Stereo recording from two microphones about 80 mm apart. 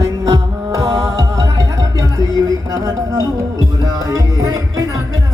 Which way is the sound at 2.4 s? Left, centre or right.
Right.